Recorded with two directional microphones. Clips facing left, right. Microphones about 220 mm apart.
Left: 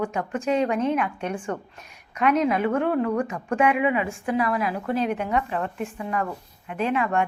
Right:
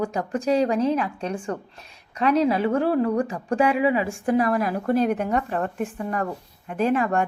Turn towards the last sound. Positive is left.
turn(degrees=-40)  # may be behind; listen again after turning